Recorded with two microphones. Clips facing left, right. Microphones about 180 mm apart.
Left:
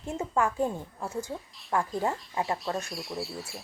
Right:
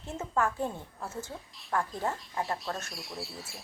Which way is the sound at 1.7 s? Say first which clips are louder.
Left 3 dB; 15° left (ahead or behind).